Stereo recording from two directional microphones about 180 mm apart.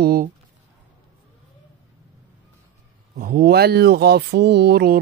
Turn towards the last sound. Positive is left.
turn(degrees=-60)  # may be behind; listen again after turning